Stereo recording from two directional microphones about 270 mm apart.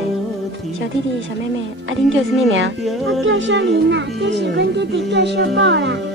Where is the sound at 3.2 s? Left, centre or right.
Right.